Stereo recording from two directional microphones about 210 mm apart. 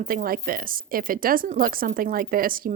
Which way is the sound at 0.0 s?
40° right (ahead or behind).